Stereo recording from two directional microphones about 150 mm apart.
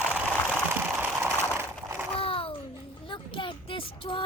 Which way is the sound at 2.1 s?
35° left (ahead or behind).